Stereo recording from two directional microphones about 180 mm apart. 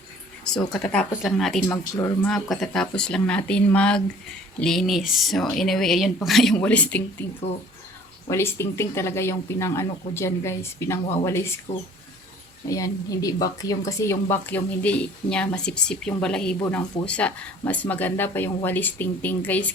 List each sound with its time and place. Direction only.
0.7 s speech: 5° left (ahead or behind)
1.6 s speech: 15° left (ahead or behind)
2.2 s speech: centre (ahead or behind)
8.3 s speech: 15° left (ahead or behind)
12.6 s speech: 20° left (ahead or behind)